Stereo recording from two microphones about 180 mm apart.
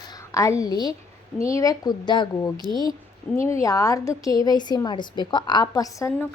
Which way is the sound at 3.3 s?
10° left (ahead or behind).